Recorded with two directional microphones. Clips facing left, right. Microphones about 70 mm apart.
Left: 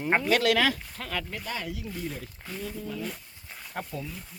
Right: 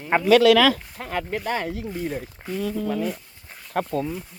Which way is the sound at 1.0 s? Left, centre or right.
Right.